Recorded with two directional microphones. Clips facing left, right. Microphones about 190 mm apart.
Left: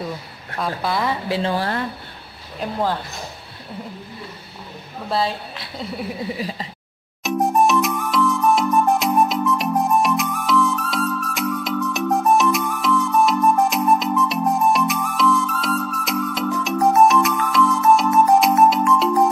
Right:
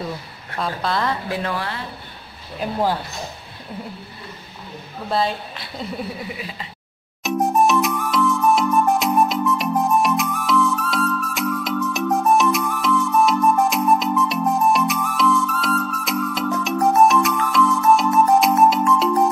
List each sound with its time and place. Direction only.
0.6 s a woman's voice: 10° left (ahead or behind)
1.3 s speech: 25° left (ahead or behind)
2.6 s speech: 10° right (ahead or behind)
5.1 s speech: centre (ahead or behind)
6.3 s speech: 35° left (ahead or behind)
7.2 s music: centre (ahead or behind)